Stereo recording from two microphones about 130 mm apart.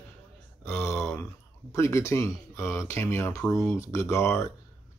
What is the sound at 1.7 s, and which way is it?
Speech, 20° left (ahead or behind).